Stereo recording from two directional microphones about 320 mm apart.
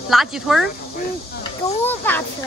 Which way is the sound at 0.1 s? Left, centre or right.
Centre.